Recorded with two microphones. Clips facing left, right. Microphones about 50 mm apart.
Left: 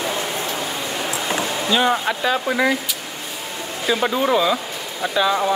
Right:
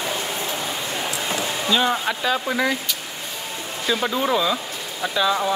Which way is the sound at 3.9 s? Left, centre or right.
Centre.